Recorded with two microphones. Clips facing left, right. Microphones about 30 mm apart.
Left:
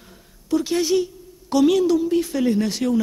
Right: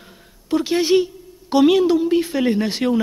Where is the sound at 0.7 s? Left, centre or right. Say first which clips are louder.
Right 6 dB; right.